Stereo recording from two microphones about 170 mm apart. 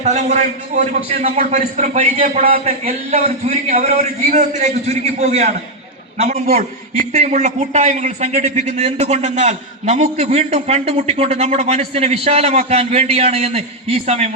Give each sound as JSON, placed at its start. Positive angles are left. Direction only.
{"t": 0.0, "sound": "a man's voice", "side_deg": -40}
{"t": 2.2, "sound": "a man's voice", "side_deg": -55}
{"t": 2.6, "sound": "a man's voice", "side_deg": -40}
{"t": 7.1, "sound": "a man's voice", "side_deg": -40}